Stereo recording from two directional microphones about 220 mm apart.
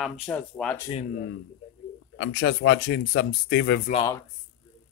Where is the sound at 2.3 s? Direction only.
50° left (ahead or behind).